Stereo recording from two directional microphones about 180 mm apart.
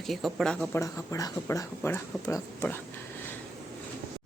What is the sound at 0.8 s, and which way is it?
Speech, 20° left (ahead or behind).